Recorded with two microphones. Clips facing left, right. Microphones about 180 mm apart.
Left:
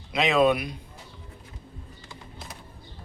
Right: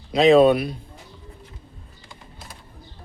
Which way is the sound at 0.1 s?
35° right (ahead or behind).